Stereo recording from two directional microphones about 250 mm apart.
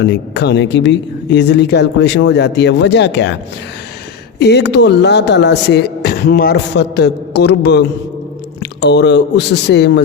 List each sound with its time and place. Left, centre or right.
0.0 s speech: left
4.4 s speech: left